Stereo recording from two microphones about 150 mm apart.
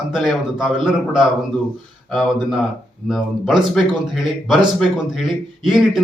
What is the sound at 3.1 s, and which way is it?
Speech, centre (ahead or behind).